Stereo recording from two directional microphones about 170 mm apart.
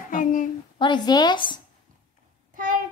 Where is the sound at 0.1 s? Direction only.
50° left (ahead or behind).